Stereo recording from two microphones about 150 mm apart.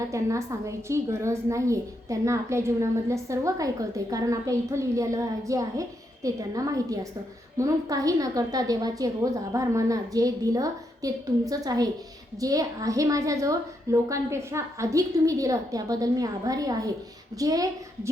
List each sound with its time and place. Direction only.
0.1 s a woman's voice: 20° right (ahead or behind)